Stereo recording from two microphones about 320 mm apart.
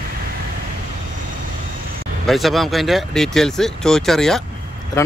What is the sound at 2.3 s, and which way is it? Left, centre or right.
Speech, centre.